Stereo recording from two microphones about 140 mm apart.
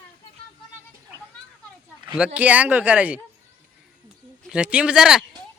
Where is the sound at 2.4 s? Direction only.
10° right (ahead or behind).